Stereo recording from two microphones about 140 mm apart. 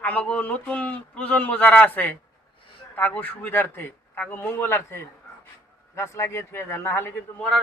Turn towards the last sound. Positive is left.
turn(degrees=15)  # may be behind; listen again after turning